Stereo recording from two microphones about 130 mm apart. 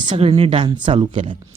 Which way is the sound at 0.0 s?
40° right (ahead or behind).